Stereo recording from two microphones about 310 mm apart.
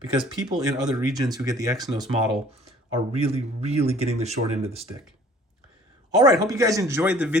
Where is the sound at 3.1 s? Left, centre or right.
Centre.